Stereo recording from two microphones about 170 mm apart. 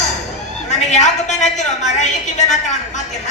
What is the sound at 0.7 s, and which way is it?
A woman's voice, 45° left (ahead or behind).